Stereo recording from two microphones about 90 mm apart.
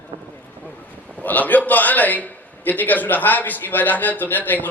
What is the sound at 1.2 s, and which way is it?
A man's voice, 20° left (ahead or behind).